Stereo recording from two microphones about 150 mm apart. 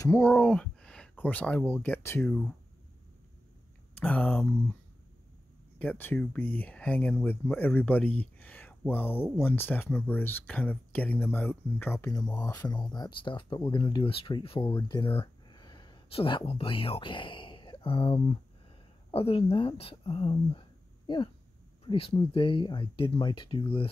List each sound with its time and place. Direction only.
0.2 s speech: 5° left (ahead or behind)
4.0 s speech: 10° left (ahead or behind)
5.8 s speech: 10° left (ahead or behind); by 20.6 s 35° left (ahead or behind)
21.8 s speech: 40° left (ahead or behind)